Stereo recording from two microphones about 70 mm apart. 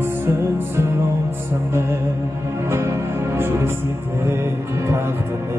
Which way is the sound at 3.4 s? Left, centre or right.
Right.